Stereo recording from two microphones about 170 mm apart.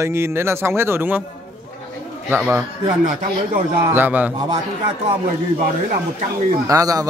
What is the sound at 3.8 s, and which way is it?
Speech, 10° right (ahead or behind).